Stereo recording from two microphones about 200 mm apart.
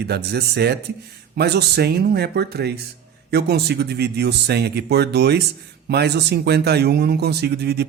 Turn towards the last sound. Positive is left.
turn(degrees=-55)  # may be behind; listen again after turning